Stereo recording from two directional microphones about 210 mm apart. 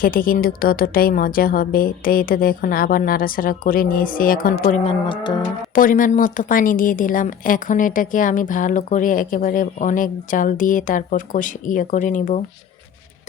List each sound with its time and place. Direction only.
0.0 s a woman's voice: 45° left (ahead or behind)
5.0 s livestock: 25° left (ahead or behind)
5.7 s a woman's voice: 40° left (ahead or behind)